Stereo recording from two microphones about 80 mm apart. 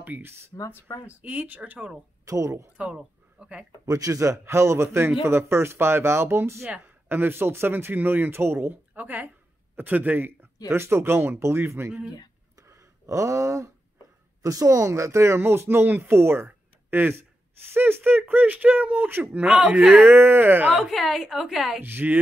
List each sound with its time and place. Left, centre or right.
0.0 s speech: right
2.2 s speech: right
3.3 s speech: centre
3.8 s speech: right
8.9 s a woman's voice: centre
12.6 s a sound: right
14.4 s speech: right; by 19.8 s centre
20.0 s speech: right
20.7 s a woman's voice: centre
21.8 s speech: right